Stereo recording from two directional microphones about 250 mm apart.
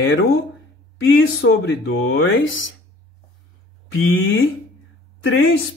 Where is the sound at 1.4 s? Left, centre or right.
Left.